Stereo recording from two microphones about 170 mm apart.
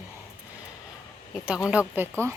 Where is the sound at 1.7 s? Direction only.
10° right (ahead or behind).